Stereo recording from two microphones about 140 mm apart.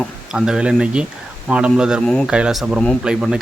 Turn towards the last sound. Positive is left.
turn(degrees=-5)  # may be behind; listen again after turning